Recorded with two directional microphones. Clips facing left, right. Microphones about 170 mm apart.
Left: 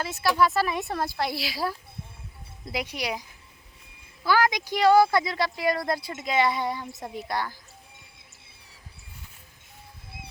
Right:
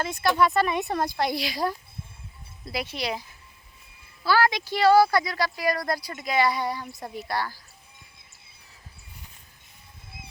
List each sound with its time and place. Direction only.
0.0 s a woman's voice: 5° left (ahead or behind)
2.6 s speech: 15° left (ahead or behind)
4.3 s speech: 15° left (ahead or behind)